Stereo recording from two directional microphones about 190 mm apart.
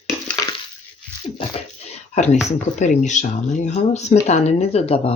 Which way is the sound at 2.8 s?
40° left (ahead or behind).